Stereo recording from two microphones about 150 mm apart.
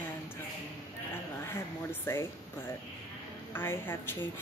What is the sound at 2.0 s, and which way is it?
Speech, 15° left (ahead or behind).